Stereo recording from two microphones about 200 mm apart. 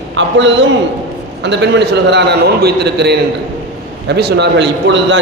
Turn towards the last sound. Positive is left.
turn(degrees=-65)  # may be behind; listen again after turning